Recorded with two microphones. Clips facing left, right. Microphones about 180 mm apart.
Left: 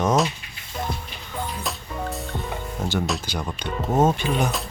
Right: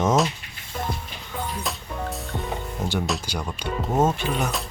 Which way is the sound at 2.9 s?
Centre (ahead or behind).